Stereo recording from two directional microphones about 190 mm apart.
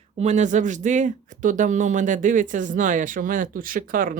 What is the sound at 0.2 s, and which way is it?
Speech, 40° right (ahead or behind).